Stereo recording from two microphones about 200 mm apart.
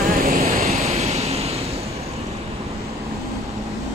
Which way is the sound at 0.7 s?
30° right (ahead or behind).